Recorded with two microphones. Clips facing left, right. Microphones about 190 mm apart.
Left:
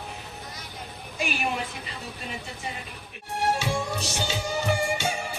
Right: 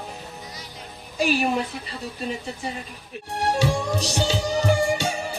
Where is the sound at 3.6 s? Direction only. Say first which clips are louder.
Right 5 dB; 35° right (ahead or behind).